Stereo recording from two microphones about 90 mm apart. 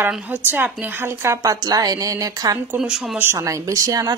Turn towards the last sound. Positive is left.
turn(degrees=-45)  # may be behind; listen again after turning